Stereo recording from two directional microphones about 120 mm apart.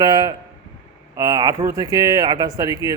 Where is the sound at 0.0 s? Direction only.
30° right (ahead or behind).